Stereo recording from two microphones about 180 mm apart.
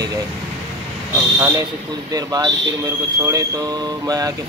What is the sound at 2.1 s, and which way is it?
Speech, 20° right (ahead or behind).